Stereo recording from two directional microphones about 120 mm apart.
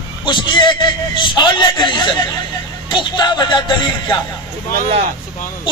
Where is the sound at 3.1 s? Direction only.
40° left (ahead or behind).